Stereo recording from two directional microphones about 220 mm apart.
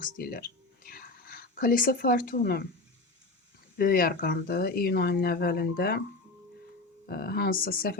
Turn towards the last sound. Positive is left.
turn(degrees=40)  # may be behind; listen again after turning